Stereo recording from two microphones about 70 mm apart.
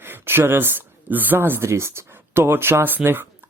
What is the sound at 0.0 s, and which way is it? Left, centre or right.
Speech, right.